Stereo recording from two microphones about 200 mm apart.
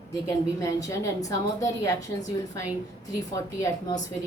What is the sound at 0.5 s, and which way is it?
A woman's voice, 15° left (ahead or behind).